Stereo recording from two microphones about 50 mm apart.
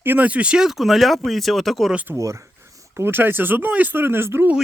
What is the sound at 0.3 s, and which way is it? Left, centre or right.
Speech, right.